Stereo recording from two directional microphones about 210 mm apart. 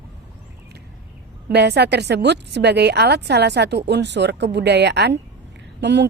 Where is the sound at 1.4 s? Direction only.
50° right (ahead or behind).